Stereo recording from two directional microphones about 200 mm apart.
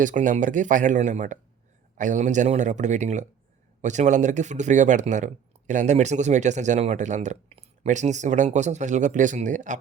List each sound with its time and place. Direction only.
0.0 s speech: 40° right (ahead or behind)